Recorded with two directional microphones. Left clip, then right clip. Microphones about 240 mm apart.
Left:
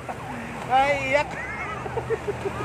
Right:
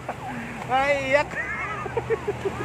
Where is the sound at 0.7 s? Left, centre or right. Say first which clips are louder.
Left 1 dB; centre.